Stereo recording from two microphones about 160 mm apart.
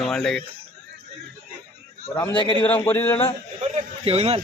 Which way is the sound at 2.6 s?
10° left (ahead or behind).